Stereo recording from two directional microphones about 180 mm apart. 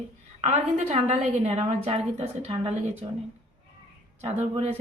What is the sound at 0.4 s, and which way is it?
A woman's voice, 35° right (ahead or behind).